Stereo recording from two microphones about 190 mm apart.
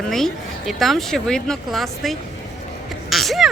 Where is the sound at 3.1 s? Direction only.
Centre (ahead or behind).